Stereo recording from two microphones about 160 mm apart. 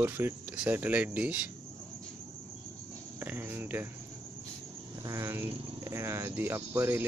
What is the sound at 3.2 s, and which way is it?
Speech, 10° right (ahead or behind).